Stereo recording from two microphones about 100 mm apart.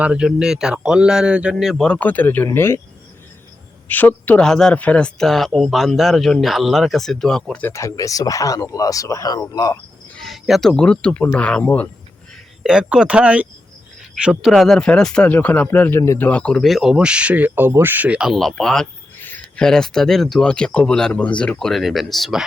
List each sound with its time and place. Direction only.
0.0 s speech: 10° right (ahead or behind)
1.8 s speech: 15° left (ahead or behind)
3.8 s speech: 15° left (ahead or behind)
7.6 s speech: 30° left (ahead or behind)
10.2 s speech: centre (ahead or behind)
12.6 s speech: 10° right (ahead or behind)
14.5 s speech: 5° left (ahead or behind)
19.2 s cricket: 20° left (ahead or behind)
19.6 s speech: 5° left (ahead or behind)